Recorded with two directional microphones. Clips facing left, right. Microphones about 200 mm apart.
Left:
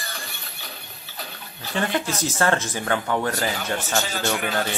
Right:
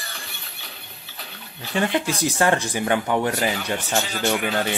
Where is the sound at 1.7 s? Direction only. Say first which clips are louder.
Right 2 dB; 15° right (ahead or behind).